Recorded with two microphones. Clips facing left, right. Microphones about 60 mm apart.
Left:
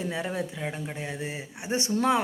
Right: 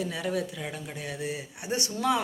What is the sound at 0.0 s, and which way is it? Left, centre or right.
Speech, left.